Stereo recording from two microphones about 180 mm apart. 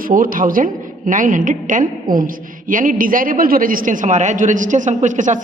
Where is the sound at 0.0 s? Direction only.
50° right (ahead or behind).